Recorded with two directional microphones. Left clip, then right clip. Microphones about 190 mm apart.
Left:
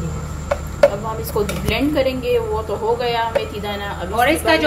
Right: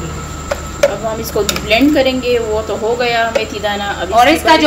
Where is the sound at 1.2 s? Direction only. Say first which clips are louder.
Right 5 dB; centre (ahead or behind).